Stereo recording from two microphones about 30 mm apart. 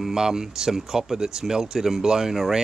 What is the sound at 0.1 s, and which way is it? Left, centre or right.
Speech, right.